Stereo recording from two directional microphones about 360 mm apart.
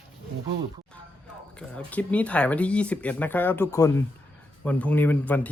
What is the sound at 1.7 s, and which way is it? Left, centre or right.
Speech, centre.